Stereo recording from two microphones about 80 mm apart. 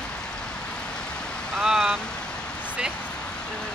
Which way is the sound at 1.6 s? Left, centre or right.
Centre.